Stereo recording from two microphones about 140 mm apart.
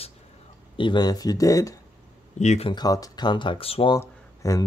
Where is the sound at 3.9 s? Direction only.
25° left (ahead or behind).